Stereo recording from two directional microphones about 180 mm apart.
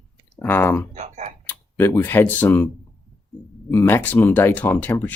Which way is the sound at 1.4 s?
10° left (ahead or behind).